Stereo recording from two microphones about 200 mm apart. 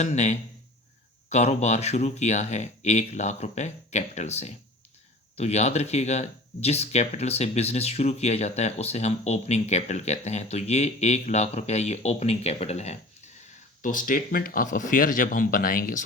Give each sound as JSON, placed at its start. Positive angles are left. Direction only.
{"t": 0.0, "sound": "speech", "side_deg": 35}